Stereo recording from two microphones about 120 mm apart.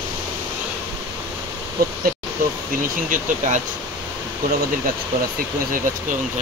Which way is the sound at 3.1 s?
90° right.